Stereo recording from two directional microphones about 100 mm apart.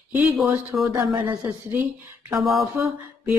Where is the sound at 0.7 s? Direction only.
5° right (ahead or behind).